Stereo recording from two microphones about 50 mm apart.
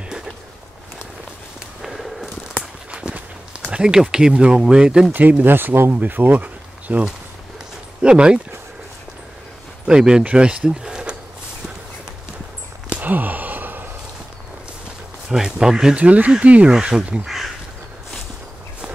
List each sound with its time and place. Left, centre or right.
1.8 s a sound: centre
2.9 s run: right
3.7 s speech: centre
5.4 s speech: right
8.0 s speech: centre
9.8 s speech: centre
13.0 s sigh: right
15.2 s speech: centre
16.0 s speech: right
17.2 s crow: centre